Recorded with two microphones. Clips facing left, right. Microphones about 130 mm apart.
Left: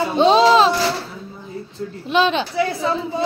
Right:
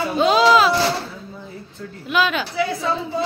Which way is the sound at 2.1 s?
30° left (ahead or behind).